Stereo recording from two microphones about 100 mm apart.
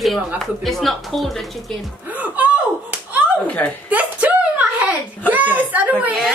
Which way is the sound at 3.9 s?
15° right (ahead or behind).